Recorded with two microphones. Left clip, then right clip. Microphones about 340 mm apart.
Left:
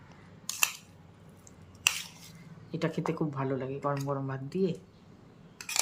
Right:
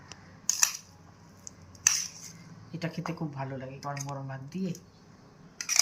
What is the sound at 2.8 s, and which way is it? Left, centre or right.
Speech, centre.